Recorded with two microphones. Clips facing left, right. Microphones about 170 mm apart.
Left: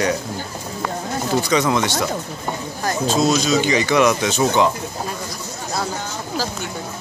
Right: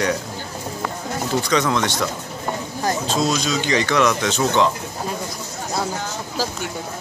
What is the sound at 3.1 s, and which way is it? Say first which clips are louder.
Speech: left 7 dB; 5° left (ahead or behind).